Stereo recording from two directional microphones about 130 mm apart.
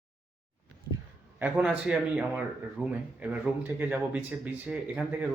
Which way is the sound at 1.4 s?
15° right (ahead or behind).